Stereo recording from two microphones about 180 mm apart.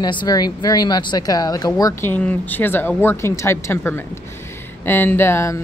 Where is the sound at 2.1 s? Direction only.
10° left (ahead or behind).